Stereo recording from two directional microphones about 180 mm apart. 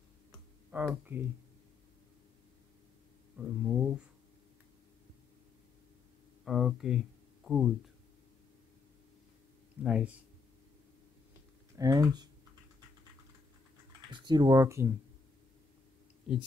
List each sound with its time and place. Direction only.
0.7 s speech: 10° right (ahead or behind)
3.3 s a sound: 5° right (ahead or behind)
6.4 s speech: centre (ahead or behind)
9.8 s speech: 5° right (ahead or behind)
11.7 s speech: 20° right (ahead or behind)
14.1 s speech: 25° right (ahead or behind)
16.3 s speech: 5° right (ahead or behind)